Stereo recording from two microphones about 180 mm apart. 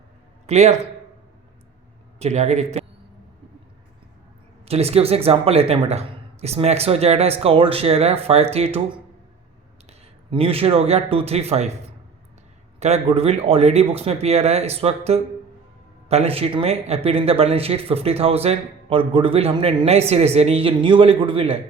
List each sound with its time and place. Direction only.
0.4 s speech: 40° right (ahead or behind)
2.1 s speech: 40° right (ahead or behind)
4.7 s speech: 35° right (ahead or behind)
10.3 s speech: 30° right (ahead or behind)
12.8 s speech: 35° right (ahead or behind)